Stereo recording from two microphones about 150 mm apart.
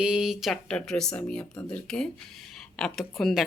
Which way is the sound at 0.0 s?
5° right (ahead or behind).